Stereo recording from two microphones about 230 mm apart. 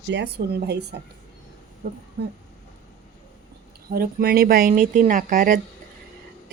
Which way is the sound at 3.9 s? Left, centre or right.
Right.